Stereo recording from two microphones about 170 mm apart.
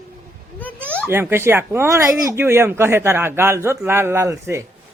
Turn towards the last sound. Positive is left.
turn(degrees=-15)  # may be behind; listen again after turning